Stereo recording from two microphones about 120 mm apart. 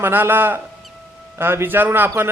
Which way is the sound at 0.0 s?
15° right (ahead or behind).